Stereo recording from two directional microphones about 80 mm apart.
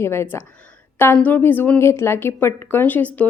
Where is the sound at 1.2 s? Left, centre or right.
Left.